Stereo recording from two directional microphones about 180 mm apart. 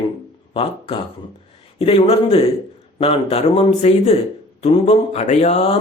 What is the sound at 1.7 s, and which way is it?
Speech, 35° left (ahead or behind).